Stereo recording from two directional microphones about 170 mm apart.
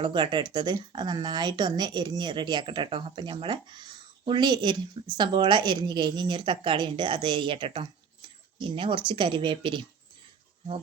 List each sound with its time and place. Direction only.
0.0 s speech: 30° right (ahead or behind)